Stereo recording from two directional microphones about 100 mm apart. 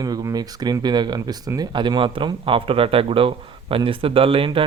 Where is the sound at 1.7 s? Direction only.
55° right (ahead or behind).